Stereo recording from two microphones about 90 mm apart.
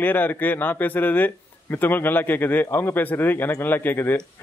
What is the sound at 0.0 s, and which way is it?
Speech, 20° left (ahead or behind).